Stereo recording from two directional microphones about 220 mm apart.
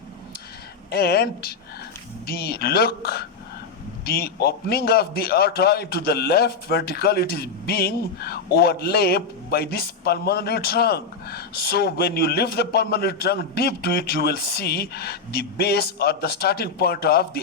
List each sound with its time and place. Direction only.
0.9 s a man's voice: 45° left (ahead or behind)